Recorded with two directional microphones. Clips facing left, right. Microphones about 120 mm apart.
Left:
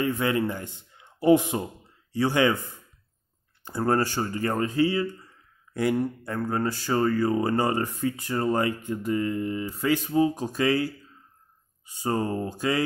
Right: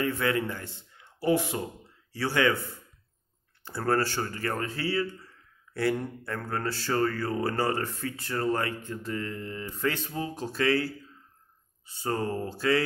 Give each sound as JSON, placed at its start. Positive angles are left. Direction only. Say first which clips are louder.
{"t": 0.0, "sound": "a man's voice", "louder": "left 3 dB", "side_deg": 20}